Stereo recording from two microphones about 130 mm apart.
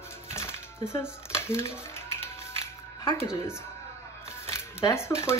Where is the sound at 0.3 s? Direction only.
20° left (ahead or behind).